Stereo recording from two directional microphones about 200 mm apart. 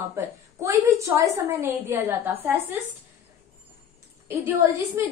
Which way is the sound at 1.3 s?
10° right (ahead or behind).